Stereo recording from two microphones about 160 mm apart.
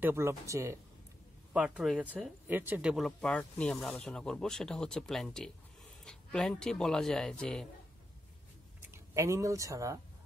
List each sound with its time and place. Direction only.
0.0 s speech: 15° right (ahead or behind)
1.5 s speech: 5° right (ahead or behind)
3.1 s speech: 10° left (ahead or behind)
8.9 s speech: 20° right (ahead or behind)